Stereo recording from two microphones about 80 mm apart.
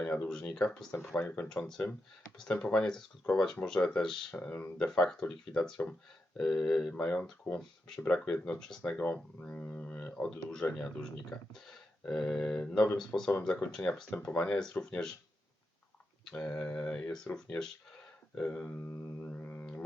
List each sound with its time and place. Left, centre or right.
0.0 s speech: centre
1.1 s speech: left
1.5 s speech: centre
4.9 s speech: centre
16.2 s speech: centre